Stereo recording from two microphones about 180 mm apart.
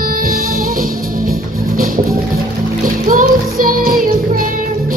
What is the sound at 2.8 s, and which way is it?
Music, 50° right (ahead or behind).